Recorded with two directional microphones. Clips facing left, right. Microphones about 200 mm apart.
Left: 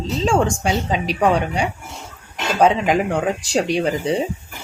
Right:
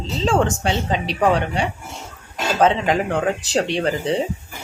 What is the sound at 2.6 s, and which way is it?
Speech, 10° left (ahead or behind).